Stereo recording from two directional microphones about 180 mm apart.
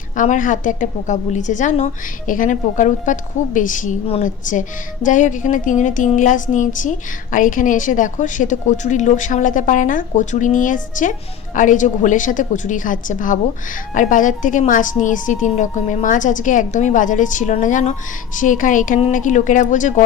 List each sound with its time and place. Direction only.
0.2 s speech: 45° left (ahead or behind)